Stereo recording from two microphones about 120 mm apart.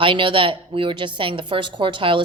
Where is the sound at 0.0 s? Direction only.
45° right (ahead or behind).